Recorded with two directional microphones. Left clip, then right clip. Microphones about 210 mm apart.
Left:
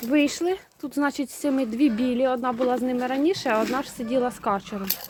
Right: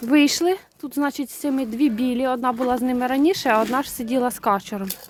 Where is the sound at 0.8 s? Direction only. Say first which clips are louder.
Right 1 dB; 20° right (ahead or behind); by 4.8 s 35° right (ahead or behind).